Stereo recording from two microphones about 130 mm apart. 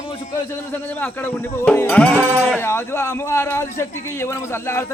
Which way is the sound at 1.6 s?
15° left (ahead or behind).